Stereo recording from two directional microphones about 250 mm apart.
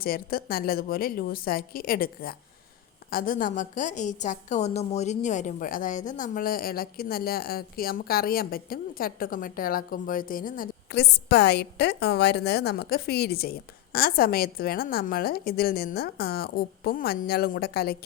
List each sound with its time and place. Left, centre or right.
0.0 s a woman's voice: left